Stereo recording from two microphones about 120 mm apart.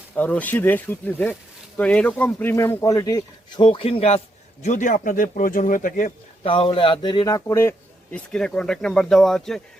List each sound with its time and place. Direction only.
0.1 s speech: 15° left (ahead or behind); by 3.6 s 30° left (ahead or behind)
3.6 s speech: 45° left (ahead or behind)
4.6 s speech: 85° left
6.4 s a man's voice: 45° left (ahead or behind); by 8.2 s 20° left (ahead or behind)
8.3 s speech: 5° left (ahead or behind)